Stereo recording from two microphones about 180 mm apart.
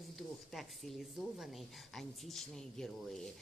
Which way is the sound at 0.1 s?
Centre (ahead or behind).